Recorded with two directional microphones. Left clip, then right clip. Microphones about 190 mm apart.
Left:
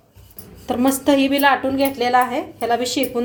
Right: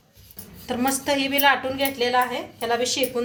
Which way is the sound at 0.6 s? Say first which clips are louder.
Left 6 dB; 55° left (ahead or behind).